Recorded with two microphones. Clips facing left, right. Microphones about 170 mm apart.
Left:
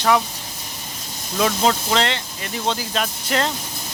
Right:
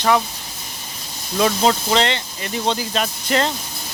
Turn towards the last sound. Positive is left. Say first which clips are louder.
# right 2 dB
turn(degrees=0)  # may be behind; listen again after turning